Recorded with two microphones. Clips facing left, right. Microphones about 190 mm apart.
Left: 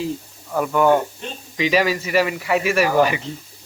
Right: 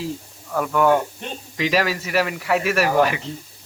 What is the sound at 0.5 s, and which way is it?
A man's voice, 5° left (ahead or behind).